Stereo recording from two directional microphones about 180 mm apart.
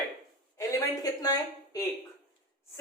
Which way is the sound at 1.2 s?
20° left (ahead or behind).